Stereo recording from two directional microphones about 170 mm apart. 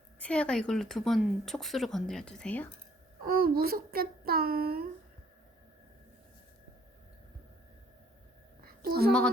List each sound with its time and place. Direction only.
0.2 s speech: 5° left (ahead or behind)
3.2 s a child's voice: 60° right (ahead or behind)
8.6 s a sound: 65° right (ahead or behind)